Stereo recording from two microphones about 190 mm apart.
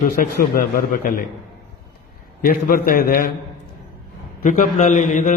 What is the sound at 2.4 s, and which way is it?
Speech, 50° left (ahead or behind).